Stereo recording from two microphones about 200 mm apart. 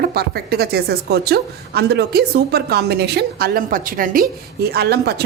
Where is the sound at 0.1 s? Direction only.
50° right (ahead or behind).